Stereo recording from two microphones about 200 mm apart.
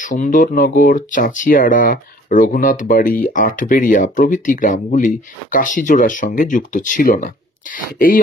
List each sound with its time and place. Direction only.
0.0 s speech: 40° left (ahead or behind)